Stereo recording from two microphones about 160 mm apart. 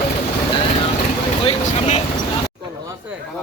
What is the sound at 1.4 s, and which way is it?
Vehicle, 40° left (ahead or behind).